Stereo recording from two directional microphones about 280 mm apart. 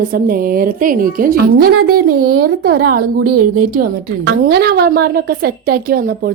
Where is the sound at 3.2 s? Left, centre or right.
Right.